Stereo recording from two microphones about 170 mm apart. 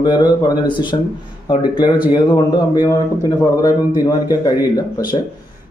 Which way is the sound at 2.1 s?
25° left (ahead or behind).